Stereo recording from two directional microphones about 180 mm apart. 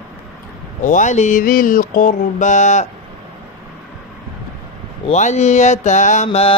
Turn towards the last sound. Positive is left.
turn(degrees=35)  # may be behind; listen again after turning